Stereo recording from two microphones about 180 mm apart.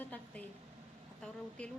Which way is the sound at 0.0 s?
10° left (ahead or behind).